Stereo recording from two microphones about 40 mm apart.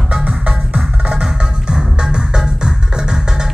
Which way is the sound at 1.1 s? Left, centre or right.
Centre.